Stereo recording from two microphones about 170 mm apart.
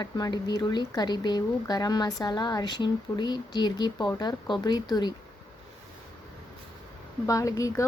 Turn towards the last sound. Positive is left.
turn(degrees=20)  # may be behind; listen again after turning